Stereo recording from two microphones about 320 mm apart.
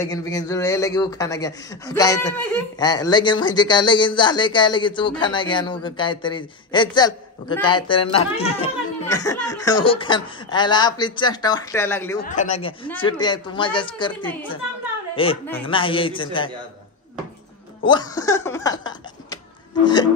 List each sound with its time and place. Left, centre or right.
0.1 s a man's voice: centre
12.2 s a man's voice: left
15.4 s a man's voice: centre
17.8 s speech: centre